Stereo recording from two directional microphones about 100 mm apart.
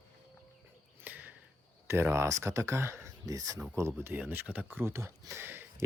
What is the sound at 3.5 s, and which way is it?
Speech, 15° right (ahead or behind).